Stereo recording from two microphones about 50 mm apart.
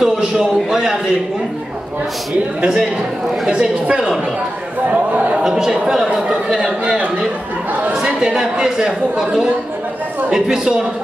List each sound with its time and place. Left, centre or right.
0.0 s a man's voice: centre
2.6 s speech: centre
4.9 s a man's voice: right
5.4 s speech: centre
8.0 s speech: centre